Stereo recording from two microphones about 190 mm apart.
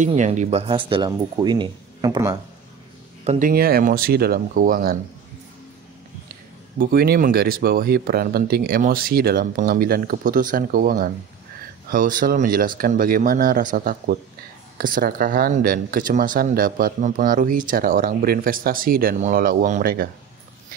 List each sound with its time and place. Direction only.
0.0 s speech: 40° right (ahead or behind); by 2.3 s 20° right (ahead or behind)
3.3 s speech: 45° right (ahead or behind)
6.8 s speech: 50° right (ahead or behind)